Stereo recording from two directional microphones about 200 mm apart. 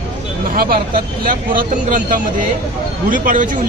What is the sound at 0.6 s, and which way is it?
Speech, 50° right (ahead or behind).